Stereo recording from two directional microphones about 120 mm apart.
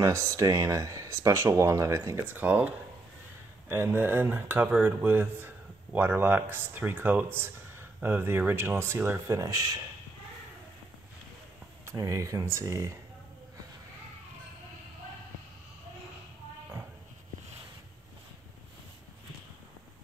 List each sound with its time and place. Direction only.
0.0 s speech: 25° right (ahead or behind)
11.8 s speech: 25° right (ahead or behind)